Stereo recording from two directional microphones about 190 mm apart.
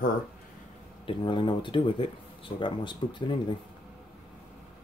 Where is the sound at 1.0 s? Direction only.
25° left (ahead or behind).